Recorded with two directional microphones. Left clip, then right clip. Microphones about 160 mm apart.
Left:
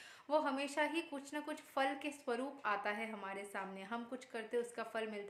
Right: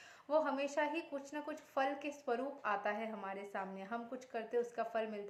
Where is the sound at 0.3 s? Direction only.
20° left (ahead or behind).